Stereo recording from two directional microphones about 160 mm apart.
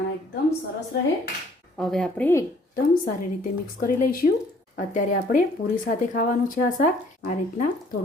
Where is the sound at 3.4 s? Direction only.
60° left (ahead or behind).